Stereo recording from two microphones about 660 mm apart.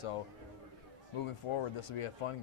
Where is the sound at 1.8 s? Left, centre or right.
Left.